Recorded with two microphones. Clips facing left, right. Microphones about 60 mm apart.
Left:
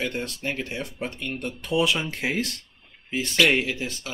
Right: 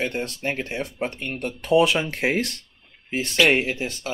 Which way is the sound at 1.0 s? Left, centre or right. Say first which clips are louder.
Right 2 dB; right.